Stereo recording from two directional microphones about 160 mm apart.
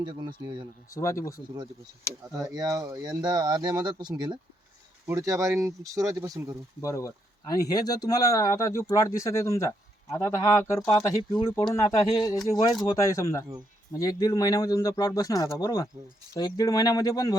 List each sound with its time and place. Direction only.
0.0 s speech: 30° right (ahead or behind)
0.9 s speech: 20° left (ahead or behind)
2.5 s speech: 20° right (ahead or behind)
6.8 s speech: 20° left (ahead or behind)